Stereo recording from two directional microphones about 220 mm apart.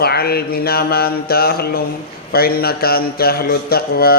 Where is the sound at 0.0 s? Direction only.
45° left (ahead or behind).